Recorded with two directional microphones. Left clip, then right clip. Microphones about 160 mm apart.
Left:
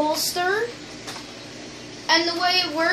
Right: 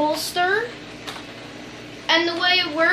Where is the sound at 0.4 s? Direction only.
5° left (ahead or behind).